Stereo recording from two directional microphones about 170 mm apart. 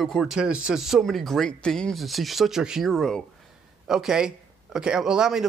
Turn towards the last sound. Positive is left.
turn(degrees=-5)  # may be behind; listen again after turning